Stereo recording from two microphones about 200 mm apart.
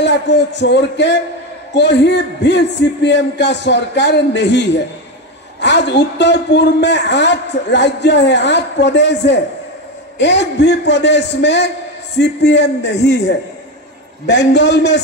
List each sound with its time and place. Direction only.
0.0 s a woman's voice: 60° left (ahead or behind)
14.2 s a woman's voice: 60° left (ahead or behind)